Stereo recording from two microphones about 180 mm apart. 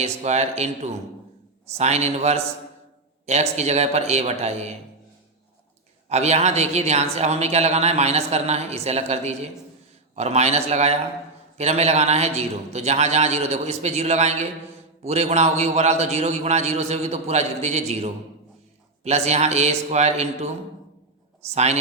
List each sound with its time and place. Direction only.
0.0 s a man's voice: 35° right (ahead or behind)
6.1 s a man's voice: 35° right (ahead or behind)
21.5 s a man's voice: 35° right (ahead or behind)